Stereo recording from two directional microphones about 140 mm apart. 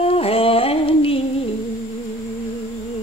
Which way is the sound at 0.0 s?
45° left (ahead or behind).